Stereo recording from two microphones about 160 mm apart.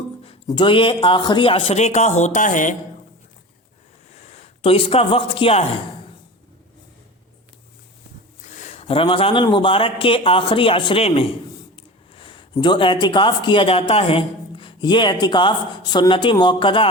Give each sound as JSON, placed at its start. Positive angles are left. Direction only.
{"t": 0.4, "sound": "speech", "side_deg": 30}
{"t": 4.2, "sound": "a man's voice", "side_deg": 45}
{"t": 8.5, "sound": "speech", "side_deg": 45}